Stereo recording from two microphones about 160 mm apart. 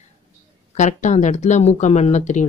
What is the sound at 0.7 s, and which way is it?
Speech, 50° left (ahead or behind).